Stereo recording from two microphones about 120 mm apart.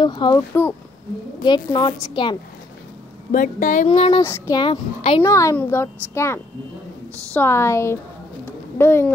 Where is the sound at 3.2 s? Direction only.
90° left.